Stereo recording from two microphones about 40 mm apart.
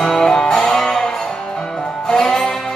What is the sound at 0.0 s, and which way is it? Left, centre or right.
Music, centre.